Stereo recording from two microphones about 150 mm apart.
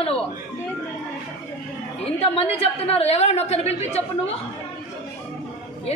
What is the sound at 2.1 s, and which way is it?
A woman's voice, 40° left (ahead or behind).